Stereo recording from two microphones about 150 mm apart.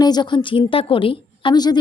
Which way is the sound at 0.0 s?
30° left (ahead or behind).